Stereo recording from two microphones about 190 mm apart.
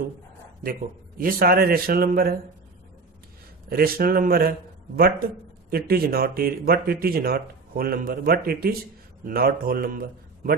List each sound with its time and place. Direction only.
0.7 s a man's voice: 50° right (ahead or behind)
3.6 s a man's voice: 50° right (ahead or behind)